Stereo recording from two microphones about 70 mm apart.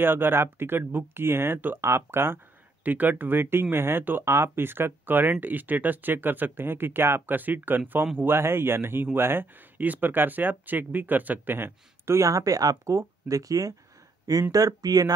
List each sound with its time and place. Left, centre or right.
0.0 s speech: right
2.8 s speech: right
12.2 s speech: right